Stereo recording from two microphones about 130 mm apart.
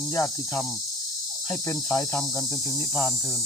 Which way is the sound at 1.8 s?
10° left (ahead or behind).